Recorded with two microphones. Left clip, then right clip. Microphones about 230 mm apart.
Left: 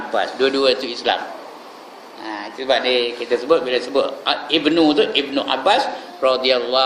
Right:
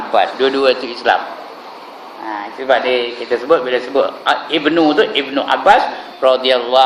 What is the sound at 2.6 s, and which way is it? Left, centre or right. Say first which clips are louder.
A man's voice: right 3 dB; left.